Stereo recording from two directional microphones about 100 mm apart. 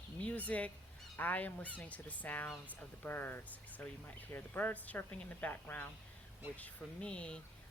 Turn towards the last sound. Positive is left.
turn(degrees=10)  # may be behind; listen again after turning